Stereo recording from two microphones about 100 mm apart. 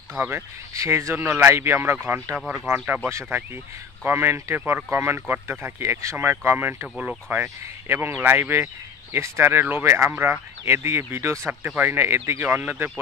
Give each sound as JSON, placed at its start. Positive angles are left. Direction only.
{"t": 0.7, "sound": "speech", "side_deg": -30}
{"t": 2.3, "sound": "speech", "side_deg": 0}
{"t": 4.0, "sound": "speech", "side_deg": -20}